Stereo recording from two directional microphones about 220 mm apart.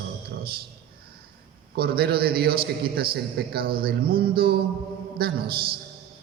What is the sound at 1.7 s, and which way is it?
A man's voice, 45° right (ahead or behind).